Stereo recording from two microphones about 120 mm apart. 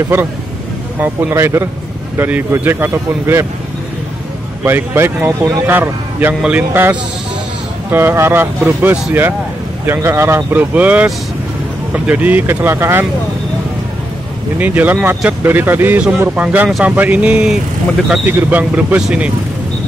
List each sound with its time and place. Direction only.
1.0 s speech: 20° right (ahead or behind)
4.6 s a man's voice: 20° right (ahead or behind)
14.6 s a man's voice: 15° right (ahead or behind)